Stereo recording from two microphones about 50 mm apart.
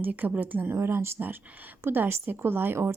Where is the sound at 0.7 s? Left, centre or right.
Right.